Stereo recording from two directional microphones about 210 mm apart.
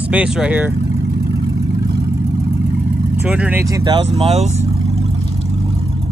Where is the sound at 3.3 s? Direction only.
5° right (ahead or behind).